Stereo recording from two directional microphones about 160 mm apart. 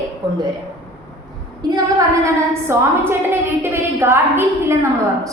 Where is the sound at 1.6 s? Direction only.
25° right (ahead or behind).